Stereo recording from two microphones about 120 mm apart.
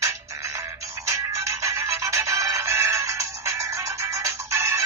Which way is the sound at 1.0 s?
25° right (ahead or behind).